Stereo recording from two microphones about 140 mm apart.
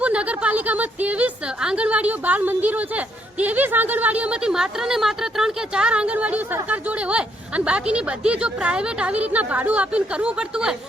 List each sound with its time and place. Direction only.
0.0 s a woman's voice: 10° right (ahead or behind)